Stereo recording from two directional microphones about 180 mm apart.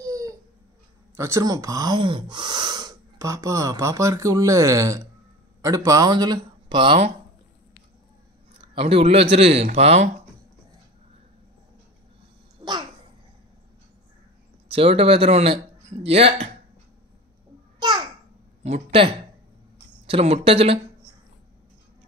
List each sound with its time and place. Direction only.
0.0 s a sound: 20° right (ahead or behind)
1.1 s speech: 15° right (ahead or behind)
8.5 s speech: 30° right (ahead or behind)
12.6 s babbling: 30° right (ahead or behind)
14.7 s speech: 30° right (ahead or behind)
17.7 s babbling: 25° right (ahead or behind)
18.6 s speech: 35° right (ahead or behind)